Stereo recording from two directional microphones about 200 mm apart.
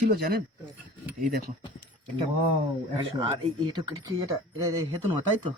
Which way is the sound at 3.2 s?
20° right (ahead or behind).